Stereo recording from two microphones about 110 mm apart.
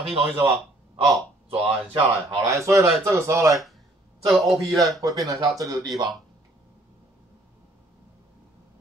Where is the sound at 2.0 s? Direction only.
30° right (ahead or behind).